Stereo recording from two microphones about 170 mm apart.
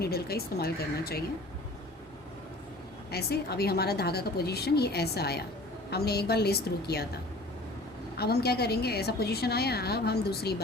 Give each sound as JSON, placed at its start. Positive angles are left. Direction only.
{"t": 0.0, "sound": "speech", "side_deg": 65}
{"t": 3.1, "sound": "a woman's voice", "side_deg": 70}